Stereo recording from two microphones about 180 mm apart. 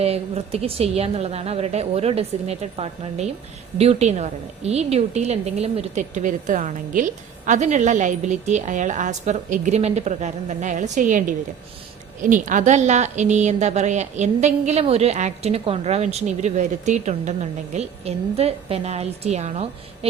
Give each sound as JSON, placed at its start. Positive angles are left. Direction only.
{"t": 0.0, "sound": "a woman's voice", "side_deg": -35}